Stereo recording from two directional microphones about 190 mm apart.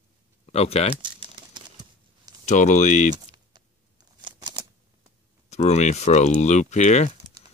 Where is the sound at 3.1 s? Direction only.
25° right (ahead or behind).